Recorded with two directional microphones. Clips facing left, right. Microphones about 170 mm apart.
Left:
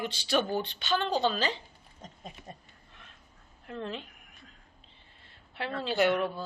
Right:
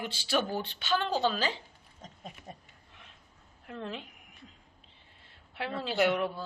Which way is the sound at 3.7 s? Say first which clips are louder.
Left 2 dB; 5° right (ahead or behind).